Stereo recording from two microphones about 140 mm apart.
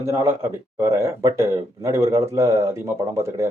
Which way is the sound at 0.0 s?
20° right (ahead or behind).